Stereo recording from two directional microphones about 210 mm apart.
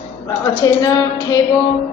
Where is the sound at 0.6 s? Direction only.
15° left (ahead or behind).